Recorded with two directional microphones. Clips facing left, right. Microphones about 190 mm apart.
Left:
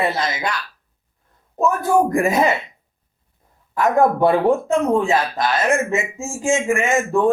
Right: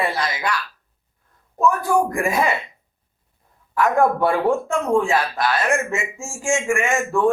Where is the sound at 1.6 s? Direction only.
20° left (ahead or behind).